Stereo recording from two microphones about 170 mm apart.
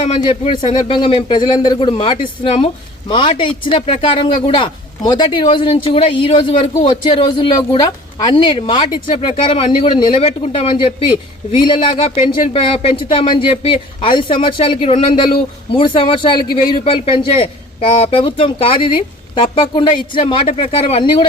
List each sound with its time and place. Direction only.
0.1 s a man's voice: 30° left (ahead or behind)